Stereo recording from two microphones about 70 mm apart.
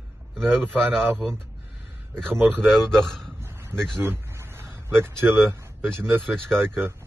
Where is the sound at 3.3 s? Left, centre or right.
Right.